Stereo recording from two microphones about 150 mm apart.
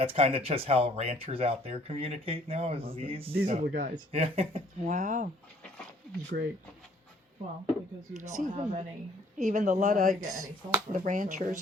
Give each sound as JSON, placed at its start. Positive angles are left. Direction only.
{"t": 0.0, "sound": "speech", "side_deg": -40}
{"t": 3.3, "sound": "speech", "side_deg": -75}
{"t": 4.1, "sound": "speech", "side_deg": -40}
{"t": 4.9, "sound": "speech", "side_deg": -55}
{"t": 6.3, "sound": "speech", "side_deg": -90}
{"t": 8.2, "sound": "speech", "side_deg": -50}
{"t": 10.2, "sound": "speech", "side_deg": -20}
{"t": 10.9, "sound": "speech", "side_deg": -60}